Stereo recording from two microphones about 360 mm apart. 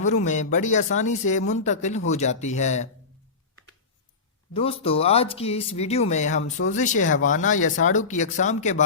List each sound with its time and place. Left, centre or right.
0.0 s speech: centre
4.5 s speech: centre